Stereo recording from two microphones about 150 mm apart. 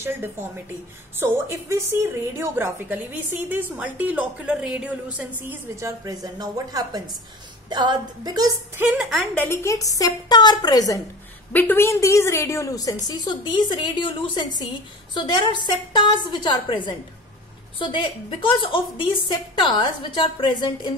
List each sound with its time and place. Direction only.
0.0 s a woman's voice: 15° right (ahead or behind)
8.7 s a woman's voice: 10° right (ahead or behind)
9.4 s a woman's voice: 15° left (ahead or behind)
11.5 s a woman's voice: 15° left (ahead or behind); by 20.9 s 30° left (ahead or behind)